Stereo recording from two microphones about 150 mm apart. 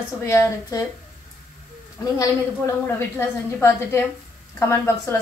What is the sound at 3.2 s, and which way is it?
A woman's voice, 15° left (ahead or behind).